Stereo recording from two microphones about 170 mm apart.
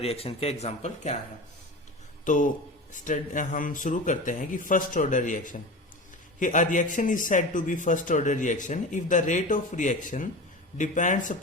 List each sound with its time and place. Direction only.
0.0 s speech: 35° left (ahead or behind)
2.2 s a man's voice: 50° left (ahead or behind)